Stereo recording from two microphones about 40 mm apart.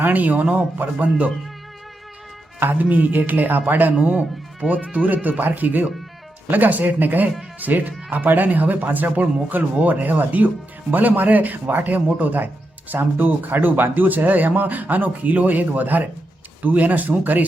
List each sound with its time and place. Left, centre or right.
0.0 s speech: right
2.6 s speech: right
4.0 s speech: right
4.7 s speech: right